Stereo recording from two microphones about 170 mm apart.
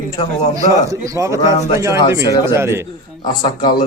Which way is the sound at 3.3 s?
25° left (ahead or behind).